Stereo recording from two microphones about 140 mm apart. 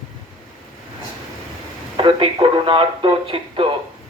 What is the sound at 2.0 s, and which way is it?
Speech, 40° right (ahead or behind).